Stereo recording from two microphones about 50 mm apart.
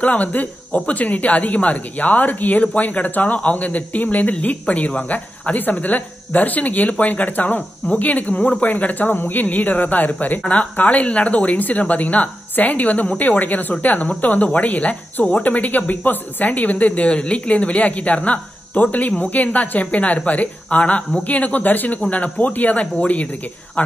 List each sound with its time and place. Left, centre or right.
0.0 s speech: left